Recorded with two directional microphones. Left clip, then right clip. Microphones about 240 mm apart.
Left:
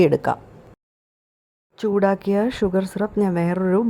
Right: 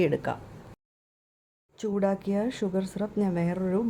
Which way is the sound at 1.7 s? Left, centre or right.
Left.